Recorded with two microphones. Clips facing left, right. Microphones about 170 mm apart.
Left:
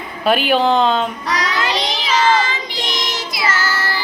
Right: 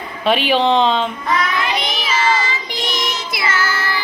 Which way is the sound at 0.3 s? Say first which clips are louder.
Even; centre (ahead or behind).